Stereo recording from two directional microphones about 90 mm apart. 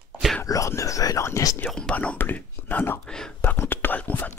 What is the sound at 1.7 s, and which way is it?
Whispering, 10° left (ahead or behind).